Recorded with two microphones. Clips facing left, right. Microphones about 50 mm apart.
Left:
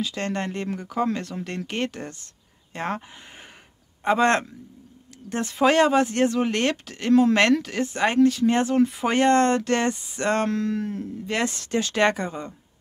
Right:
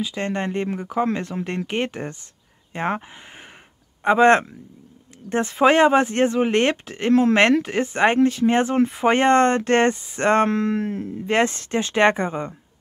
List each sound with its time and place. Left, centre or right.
0.0 s speech: centre
4.0 s speech: right